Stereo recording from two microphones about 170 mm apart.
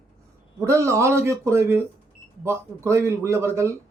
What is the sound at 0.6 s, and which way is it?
Speech, 15° right (ahead or behind).